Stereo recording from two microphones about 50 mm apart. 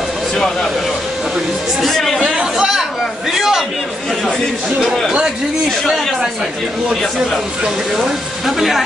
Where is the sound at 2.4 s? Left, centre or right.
Centre.